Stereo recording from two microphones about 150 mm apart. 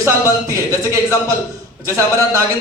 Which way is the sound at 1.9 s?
20° right (ahead or behind).